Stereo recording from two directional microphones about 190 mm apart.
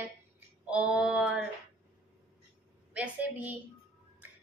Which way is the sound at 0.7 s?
5° right (ahead or behind).